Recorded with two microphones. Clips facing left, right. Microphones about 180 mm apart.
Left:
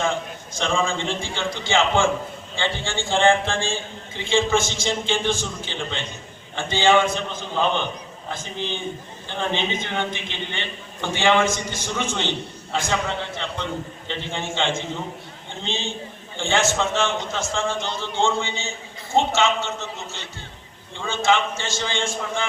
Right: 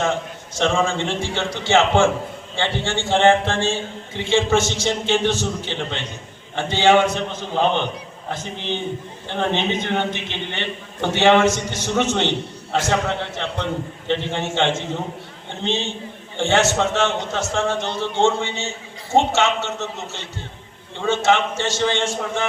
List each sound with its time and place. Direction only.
0.0 s a sound: 70° right (ahead or behind)
0.9 s a man's voice: 70° right (ahead or behind)
8.3 s a man's voice: 65° right (ahead or behind)
21.1 s a man's voice: 70° right (ahead or behind)